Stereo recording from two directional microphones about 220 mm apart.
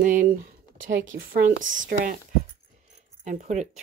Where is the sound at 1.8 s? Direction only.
35° right (ahead or behind).